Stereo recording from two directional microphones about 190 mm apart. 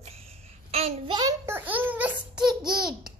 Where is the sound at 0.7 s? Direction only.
35° right (ahead or behind); by 2.1 s 10° right (ahead or behind).